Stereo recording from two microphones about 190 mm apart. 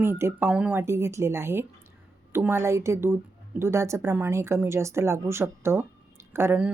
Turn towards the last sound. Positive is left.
turn(degrees=-10)  # may be behind; listen again after turning